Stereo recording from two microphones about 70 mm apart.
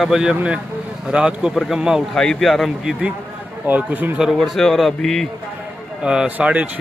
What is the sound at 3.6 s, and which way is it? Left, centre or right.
Speech, right.